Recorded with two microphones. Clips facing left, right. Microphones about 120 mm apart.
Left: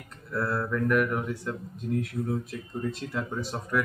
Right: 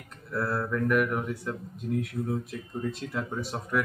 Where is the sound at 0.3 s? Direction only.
Centre (ahead or behind).